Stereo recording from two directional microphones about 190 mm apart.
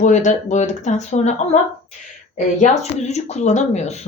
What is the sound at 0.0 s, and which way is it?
Speech, 40° left (ahead or behind).